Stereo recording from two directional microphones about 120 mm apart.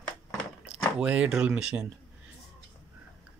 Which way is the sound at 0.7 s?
10° right (ahead or behind).